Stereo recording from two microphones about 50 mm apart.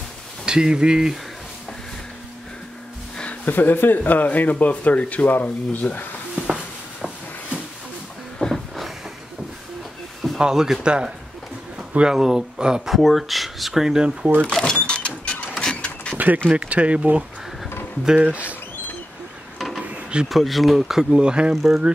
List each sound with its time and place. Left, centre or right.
0.5 s speech: centre
3.4 s speech: left
8.4 s a sound: centre
10.3 s speech: centre
12.1 s speech: centre
12.9 s speech: centre
14.4 s speech: centre
14.9 s a sound: left
15.6 s printer: left
16.5 s speech: right
19.8 s a sound: right
20.2 s speech: centre
21.1 s speech: centre
21.5 s speech: centre